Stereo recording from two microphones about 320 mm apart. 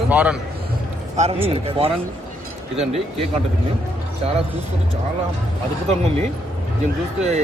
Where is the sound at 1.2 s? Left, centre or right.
Centre.